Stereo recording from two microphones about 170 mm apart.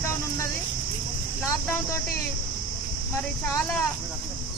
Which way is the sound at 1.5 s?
15° left (ahead or behind).